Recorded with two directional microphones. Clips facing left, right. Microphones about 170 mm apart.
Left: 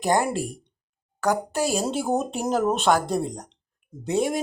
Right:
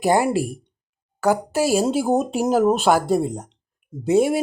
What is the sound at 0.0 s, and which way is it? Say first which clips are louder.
Speech: right 4 dB; 10° right (ahead or behind).